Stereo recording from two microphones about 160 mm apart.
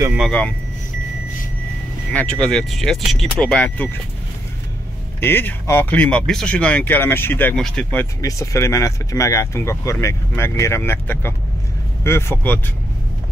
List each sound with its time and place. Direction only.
2.1 s speech: 5° left (ahead or behind)
5.2 s speech: 10° left (ahead or behind)